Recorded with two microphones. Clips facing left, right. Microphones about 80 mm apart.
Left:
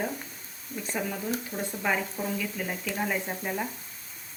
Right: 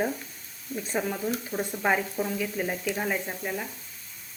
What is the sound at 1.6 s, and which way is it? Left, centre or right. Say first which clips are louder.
Speech: right 4 dB; centre.